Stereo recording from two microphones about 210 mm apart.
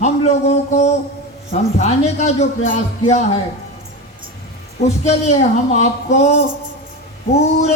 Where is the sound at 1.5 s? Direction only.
30° left (ahead or behind).